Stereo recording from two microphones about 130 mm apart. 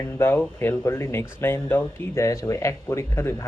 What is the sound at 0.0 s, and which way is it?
Speech, 15° left (ahead or behind).